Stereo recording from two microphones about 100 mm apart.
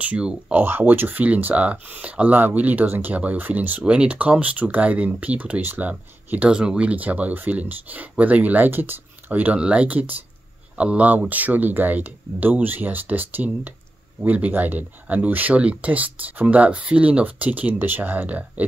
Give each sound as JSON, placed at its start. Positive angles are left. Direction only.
{"t": 0.0, "sound": "speech", "side_deg": -15}